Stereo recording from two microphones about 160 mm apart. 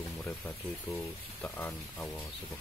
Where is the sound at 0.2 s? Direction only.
10° left (ahead or behind).